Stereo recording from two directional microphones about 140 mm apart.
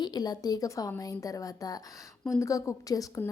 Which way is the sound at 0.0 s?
30° left (ahead or behind).